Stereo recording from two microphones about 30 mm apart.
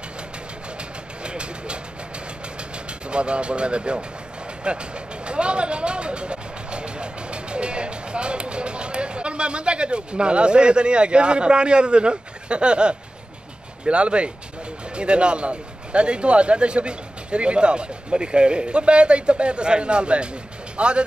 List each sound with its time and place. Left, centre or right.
0.7 s vehicle: right
2.9 s speech: right
4.6 s vehicle: right
13.8 s speech: right